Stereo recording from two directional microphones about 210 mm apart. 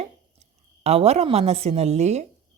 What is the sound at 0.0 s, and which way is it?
A woman's voice, 30° right (ahead or behind).